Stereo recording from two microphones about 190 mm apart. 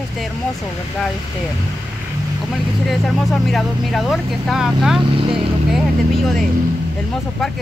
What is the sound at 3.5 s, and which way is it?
Speech, centre (ahead or behind).